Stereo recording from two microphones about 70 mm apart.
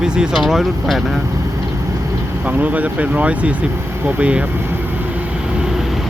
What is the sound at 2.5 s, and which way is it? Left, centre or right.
Speech, right.